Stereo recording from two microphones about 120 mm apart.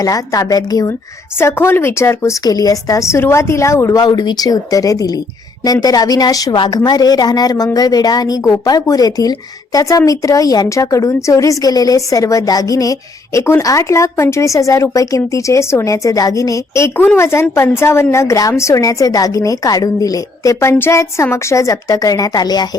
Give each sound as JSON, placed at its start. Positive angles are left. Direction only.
{"t": 0.0, "sound": "a woman's voice", "side_deg": 30}
{"t": 1.4, "sound": "a woman's voice", "side_deg": 20}